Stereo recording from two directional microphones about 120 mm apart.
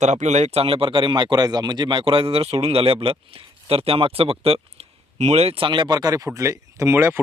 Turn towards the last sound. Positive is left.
turn(degrees=-20)  # may be behind; listen again after turning